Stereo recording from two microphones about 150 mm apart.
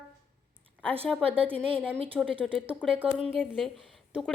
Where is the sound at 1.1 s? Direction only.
10° right (ahead or behind).